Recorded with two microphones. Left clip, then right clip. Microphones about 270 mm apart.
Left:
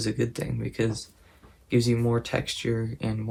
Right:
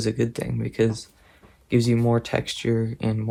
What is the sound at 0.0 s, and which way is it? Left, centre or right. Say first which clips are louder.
Speech: right 3 dB; right.